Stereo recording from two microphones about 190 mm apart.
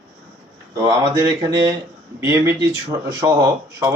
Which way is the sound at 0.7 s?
20° right (ahead or behind).